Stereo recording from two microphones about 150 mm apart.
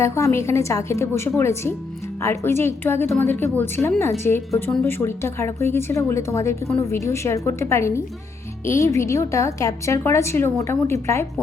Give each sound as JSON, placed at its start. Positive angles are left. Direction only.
{"t": 0.0, "sound": "a woman's voice", "side_deg": 20}